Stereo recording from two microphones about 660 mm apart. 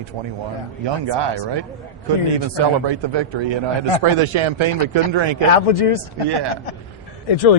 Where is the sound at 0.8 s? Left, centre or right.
Right.